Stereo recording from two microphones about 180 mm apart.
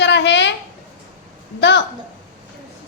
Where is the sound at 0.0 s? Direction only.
75° left (ahead or behind).